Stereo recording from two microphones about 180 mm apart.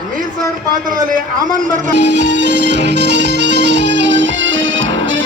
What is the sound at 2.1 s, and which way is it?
Music, 75° right (ahead or behind).